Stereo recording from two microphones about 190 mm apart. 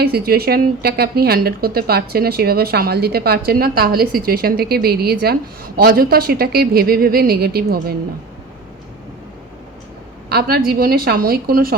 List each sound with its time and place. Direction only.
0.0 s a woman's voice: 55° right (ahead or behind)
10.2 s a woman's voice: 55° right (ahead or behind)